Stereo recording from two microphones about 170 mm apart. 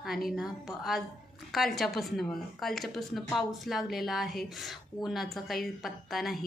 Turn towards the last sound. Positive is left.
turn(degrees=0)  # may be behind; listen again after turning